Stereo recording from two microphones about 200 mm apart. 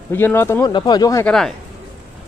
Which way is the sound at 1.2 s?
5° left (ahead or behind).